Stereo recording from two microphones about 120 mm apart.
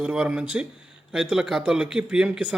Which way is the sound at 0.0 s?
10° right (ahead or behind).